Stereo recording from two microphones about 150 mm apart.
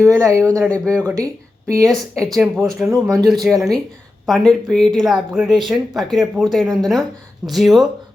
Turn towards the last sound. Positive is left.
turn(degrees=0)  # may be behind; listen again after turning